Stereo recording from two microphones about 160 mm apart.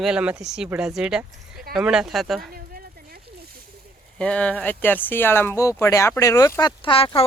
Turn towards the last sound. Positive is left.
turn(degrees=35)  # may be behind; listen again after turning